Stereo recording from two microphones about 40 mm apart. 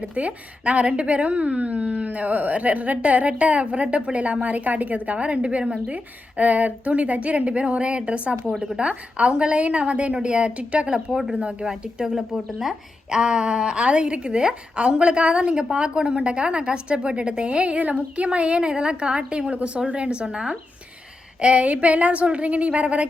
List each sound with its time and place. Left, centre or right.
0.0 s a woman's voice: right
21.4 s a woman's voice: right